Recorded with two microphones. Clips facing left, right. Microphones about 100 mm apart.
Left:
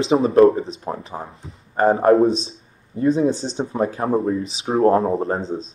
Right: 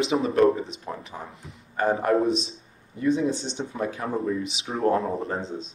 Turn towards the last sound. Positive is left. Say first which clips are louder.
# left 7 dB
turn(degrees=35)  # may be behind; listen again after turning